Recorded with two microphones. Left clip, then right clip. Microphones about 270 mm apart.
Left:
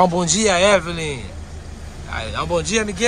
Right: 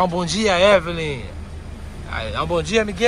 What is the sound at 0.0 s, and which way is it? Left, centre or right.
Speech, centre.